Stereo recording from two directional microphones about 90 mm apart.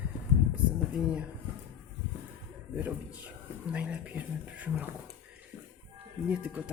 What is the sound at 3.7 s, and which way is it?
Speech, 15° right (ahead or behind).